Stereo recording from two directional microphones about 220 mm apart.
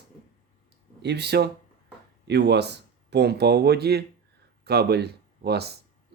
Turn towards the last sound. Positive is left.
turn(degrees=-45)  # may be behind; listen again after turning